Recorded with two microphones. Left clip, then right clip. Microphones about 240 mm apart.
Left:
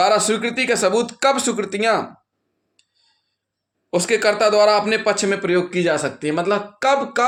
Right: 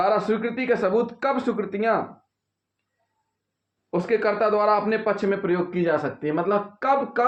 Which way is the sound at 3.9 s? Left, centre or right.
Left.